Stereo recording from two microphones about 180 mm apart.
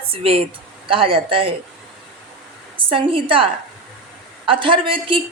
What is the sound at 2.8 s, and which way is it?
Speech, 30° right (ahead or behind).